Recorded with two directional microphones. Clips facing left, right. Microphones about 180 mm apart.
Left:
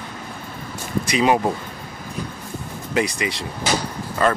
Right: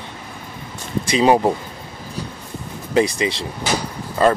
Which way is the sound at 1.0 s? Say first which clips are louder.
Right 3 dB; 30° right (ahead or behind).